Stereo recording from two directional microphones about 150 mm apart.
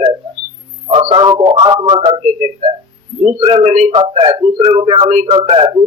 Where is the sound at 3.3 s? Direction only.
35° right (ahead or behind).